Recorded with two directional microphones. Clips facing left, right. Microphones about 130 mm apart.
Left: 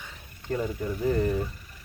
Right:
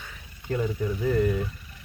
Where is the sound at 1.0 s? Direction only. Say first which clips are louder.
Right 1 dB; 30° left (ahead or behind).